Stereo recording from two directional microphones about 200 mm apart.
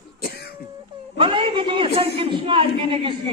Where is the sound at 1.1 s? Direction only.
25° right (ahead or behind).